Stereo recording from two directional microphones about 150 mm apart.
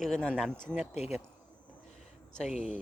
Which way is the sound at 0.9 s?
45° left (ahead or behind).